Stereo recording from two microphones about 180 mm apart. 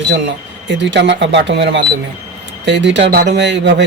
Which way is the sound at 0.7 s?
80° right.